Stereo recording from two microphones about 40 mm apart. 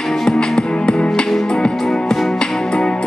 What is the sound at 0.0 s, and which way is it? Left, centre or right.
Music, centre.